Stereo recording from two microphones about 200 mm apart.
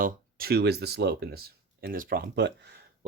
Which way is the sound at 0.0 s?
50° right (ahead or behind).